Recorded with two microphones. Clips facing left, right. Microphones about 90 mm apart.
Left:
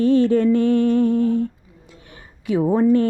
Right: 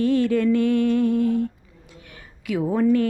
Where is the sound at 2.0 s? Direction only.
30° left (ahead or behind).